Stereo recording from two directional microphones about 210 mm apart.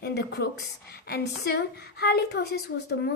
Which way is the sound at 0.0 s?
50° left (ahead or behind).